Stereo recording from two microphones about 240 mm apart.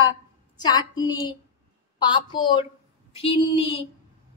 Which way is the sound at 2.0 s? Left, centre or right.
Centre.